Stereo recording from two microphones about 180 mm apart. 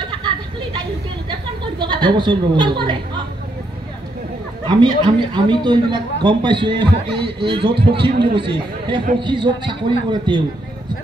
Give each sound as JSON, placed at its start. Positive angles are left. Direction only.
{"t": 0.2, "sound": "a sound", "side_deg": -25}
{"t": 1.6, "sound": "a woman's voice", "side_deg": -25}
{"t": 4.6, "sound": "a man's voice", "side_deg": -25}